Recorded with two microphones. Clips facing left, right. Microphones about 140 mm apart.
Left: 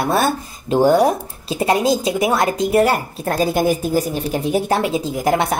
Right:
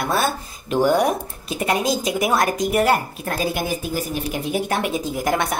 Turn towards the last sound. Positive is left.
turn(degrees=30)  # may be behind; listen again after turning